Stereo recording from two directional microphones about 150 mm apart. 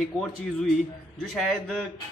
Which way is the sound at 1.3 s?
Centre (ahead or behind).